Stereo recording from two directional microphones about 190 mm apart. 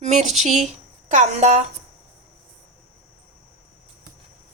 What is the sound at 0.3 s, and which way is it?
A woman's voice, 35° right (ahead or behind).